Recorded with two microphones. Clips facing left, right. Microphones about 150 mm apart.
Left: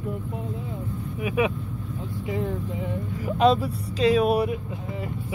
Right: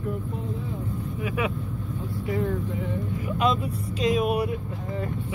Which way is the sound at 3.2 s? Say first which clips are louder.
Left 6 dB; 35° left (ahead or behind).